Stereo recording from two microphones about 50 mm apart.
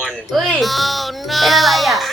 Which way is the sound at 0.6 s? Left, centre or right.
Centre.